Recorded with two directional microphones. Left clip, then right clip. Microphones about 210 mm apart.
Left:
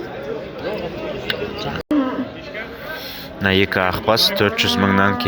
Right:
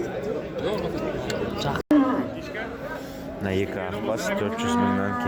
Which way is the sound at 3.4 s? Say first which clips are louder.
Left 11 dB; 15° left (ahead or behind).